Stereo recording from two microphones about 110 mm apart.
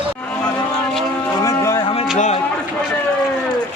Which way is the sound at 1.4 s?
30° left (ahead or behind).